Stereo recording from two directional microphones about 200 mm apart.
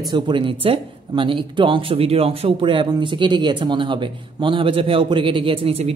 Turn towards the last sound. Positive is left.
turn(degrees=-30)  # may be behind; listen again after turning